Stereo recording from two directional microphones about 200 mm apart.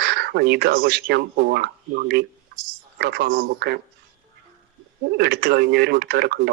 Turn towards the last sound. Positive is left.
turn(degrees=-55)  # may be behind; listen again after turning